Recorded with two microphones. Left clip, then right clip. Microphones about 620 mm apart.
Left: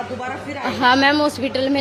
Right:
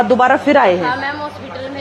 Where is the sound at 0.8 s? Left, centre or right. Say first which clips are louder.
Left 5 dB; left.